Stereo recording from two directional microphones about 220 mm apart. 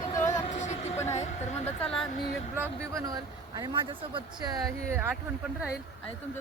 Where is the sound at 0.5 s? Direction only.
35° left (ahead or behind).